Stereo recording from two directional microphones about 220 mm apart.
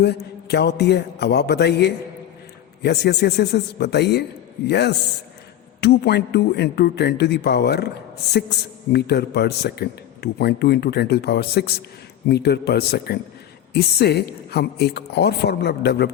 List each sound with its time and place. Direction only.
0.0 s a man's voice: 50° left (ahead or behind)